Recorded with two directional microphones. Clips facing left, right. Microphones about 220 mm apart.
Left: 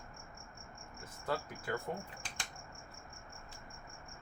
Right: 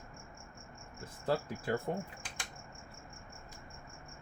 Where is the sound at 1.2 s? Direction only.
30° right (ahead or behind).